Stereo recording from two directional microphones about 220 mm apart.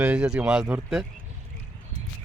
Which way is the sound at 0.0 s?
5° right (ahead or behind).